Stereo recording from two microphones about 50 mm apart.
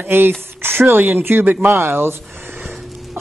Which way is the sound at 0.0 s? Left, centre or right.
Right.